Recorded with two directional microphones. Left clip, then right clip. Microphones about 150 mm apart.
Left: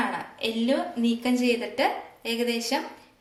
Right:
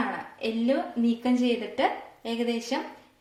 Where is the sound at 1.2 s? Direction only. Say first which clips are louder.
Left 2 dB; 45° right (ahead or behind).